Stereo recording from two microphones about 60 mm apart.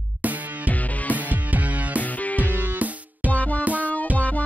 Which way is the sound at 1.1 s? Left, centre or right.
Right.